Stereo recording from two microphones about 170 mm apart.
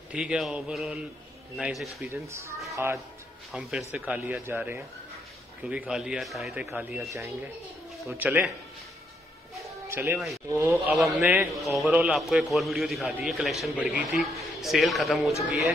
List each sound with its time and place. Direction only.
0.1 s a man's voice: 5° right (ahead or behind)
2.2 s a man's voice: 15° right (ahead or behind)
7.0 s speech: 15° right (ahead or behind)
9.6 s music: 15° right (ahead or behind)
10.5 s speech: 15° right (ahead or behind)
11.6 s a man's voice: centre (ahead or behind)